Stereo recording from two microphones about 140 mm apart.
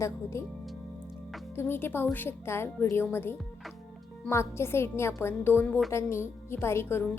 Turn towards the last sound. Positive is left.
turn(degrees=20)  # may be behind; listen again after turning